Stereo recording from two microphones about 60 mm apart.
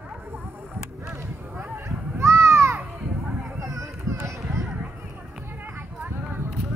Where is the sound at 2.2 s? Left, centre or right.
Right.